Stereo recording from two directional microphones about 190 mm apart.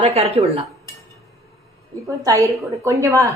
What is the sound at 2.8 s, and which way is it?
Speech, 15° right (ahead or behind).